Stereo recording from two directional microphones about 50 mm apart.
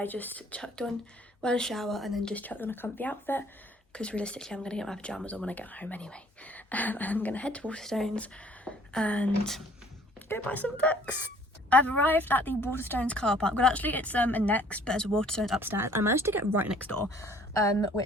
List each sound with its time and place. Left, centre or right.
0.0 s speech: left
1.4 s a woman's voice: centre
1.7 s a woman's voice: centre
2.3 s speech: left
3.9 s speech: left
5.0 s speech: left
7.8 s speech: centre
8.1 s speech: left
10.4 s speech: left
13.1 s speech: centre
13.8 s speech: left
14.8 s speech: centre
15.6 s speech: right
17.0 s speech: left